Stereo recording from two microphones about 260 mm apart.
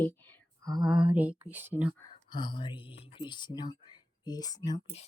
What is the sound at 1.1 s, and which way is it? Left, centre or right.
Speech, centre.